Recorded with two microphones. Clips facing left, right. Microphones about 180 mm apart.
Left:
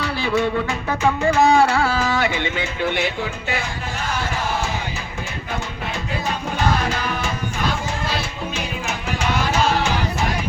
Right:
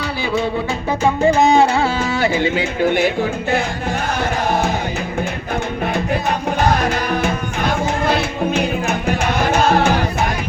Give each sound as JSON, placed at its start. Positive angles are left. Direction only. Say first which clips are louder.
{"t": 0.9, "sound": "music", "louder": "right 5 dB", "side_deg": -20}
{"t": 5.9, "sound": "music", "louder": "right 5 dB", "side_deg": -55}